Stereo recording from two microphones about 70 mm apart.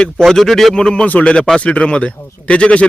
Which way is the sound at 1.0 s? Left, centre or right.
Centre.